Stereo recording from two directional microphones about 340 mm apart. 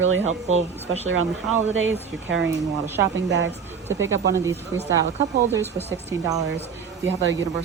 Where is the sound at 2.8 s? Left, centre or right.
Centre.